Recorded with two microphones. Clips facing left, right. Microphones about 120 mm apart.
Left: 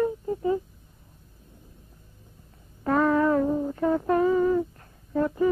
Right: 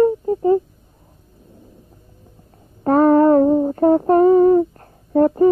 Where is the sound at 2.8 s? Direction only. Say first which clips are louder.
Right 9 dB; 40° right (ahead or behind).